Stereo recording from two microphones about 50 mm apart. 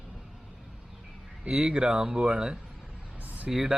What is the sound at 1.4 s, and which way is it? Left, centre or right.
Speech, centre.